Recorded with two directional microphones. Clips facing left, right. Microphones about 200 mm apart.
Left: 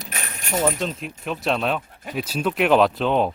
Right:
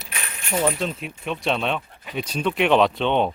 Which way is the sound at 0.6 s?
Centre (ahead or behind).